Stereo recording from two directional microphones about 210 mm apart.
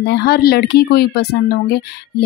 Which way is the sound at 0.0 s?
50° left (ahead or behind).